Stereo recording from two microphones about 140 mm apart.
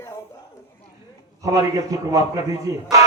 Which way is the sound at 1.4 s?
25° right (ahead or behind).